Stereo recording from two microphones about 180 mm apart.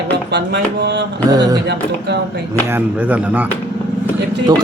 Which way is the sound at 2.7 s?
10° right (ahead or behind).